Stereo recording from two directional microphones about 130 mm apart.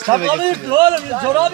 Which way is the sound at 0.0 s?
35° right (ahead or behind).